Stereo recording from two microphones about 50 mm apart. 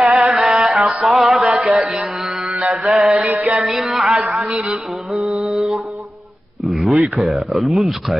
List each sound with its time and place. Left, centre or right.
0.0 s music: centre
0.4 s mantra: centre
1.0 s music: centre
2.5 s mantra: right
2.8 s speech: centre
3.1 s music: right
3.5 s speech: centre
5.5 s mantra: centre
6.6 s a sound: centre
7.2 s speech: centre